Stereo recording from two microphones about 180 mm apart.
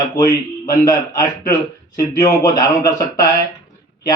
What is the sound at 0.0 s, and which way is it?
Speech, 20° left (ahead or behind).